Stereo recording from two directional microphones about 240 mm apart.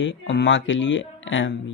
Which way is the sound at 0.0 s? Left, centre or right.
Left.